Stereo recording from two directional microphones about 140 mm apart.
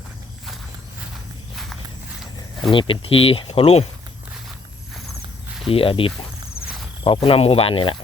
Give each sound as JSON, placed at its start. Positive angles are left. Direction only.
{"t": 2.7, "sound": "speech", "side_deg": 40}
{"t": 5.7, "sound": "speech", "side_deg": 40}